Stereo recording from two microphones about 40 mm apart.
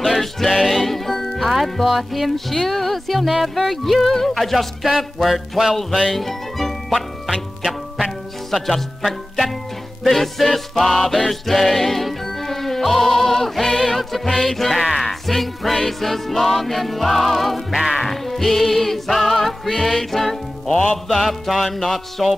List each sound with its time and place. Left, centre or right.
0.0 s music: centre
1.9 s speech: centre
8.0 s music: centre
21.1 s speech: centre